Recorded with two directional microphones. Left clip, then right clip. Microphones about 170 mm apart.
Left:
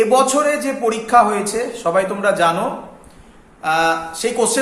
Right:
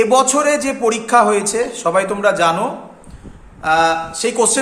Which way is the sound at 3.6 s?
25° right (ahead or behind).